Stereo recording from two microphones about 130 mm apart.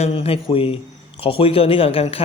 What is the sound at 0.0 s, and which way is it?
A man's voice, 50° left (ahead or behind).